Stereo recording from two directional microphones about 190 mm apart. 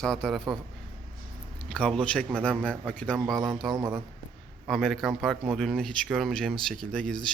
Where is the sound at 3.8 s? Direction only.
15° right (ahead or behind).